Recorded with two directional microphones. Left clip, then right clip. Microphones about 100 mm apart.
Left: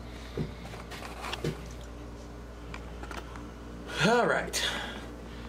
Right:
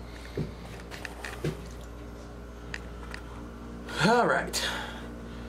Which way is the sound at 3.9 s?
20° right (ahead or behind).